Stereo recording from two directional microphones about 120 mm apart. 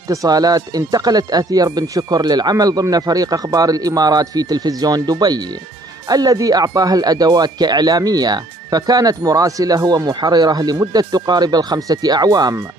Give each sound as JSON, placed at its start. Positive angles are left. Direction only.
{"t": 0.1, "sound": "speech", "side_deg": -30}